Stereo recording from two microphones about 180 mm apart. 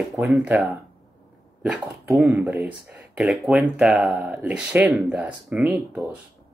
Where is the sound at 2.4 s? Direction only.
5° right (ahead or behind).